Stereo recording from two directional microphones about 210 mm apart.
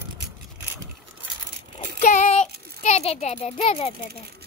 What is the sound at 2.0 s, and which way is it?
Child singing, 35° left (ahead or behind).